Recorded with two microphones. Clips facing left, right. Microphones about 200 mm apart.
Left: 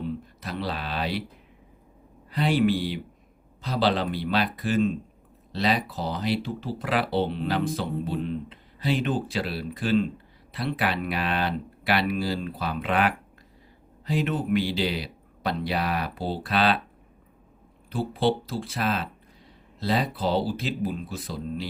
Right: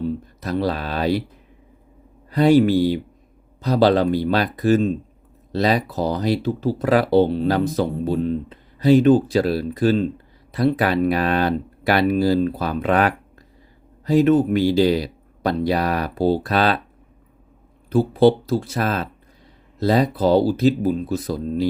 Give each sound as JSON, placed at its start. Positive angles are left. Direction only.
{"t": 0.4, "sound": "speech", "side_deg": -45}
{"t": 2.3, "sound": "speech", "side_deg": -45}
{"t": 17.8, "sound": "speech", "side_deg": -45}